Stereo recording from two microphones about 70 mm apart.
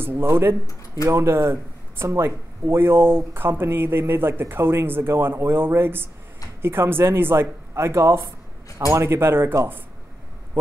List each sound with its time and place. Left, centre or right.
0.0 s speech: right